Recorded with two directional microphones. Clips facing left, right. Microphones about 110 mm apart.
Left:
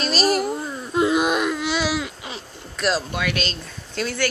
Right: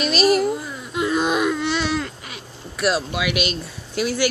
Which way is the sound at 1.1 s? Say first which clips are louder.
Even; 5° left (ahead or behind).